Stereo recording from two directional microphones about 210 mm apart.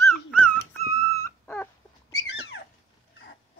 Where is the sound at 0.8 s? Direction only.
45° left (ahead or behind).